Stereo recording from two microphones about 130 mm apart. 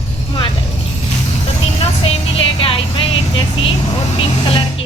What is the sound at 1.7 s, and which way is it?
A woman's voice, 50° left (ahead or behind).